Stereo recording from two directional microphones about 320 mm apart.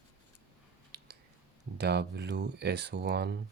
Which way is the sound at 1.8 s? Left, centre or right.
Right.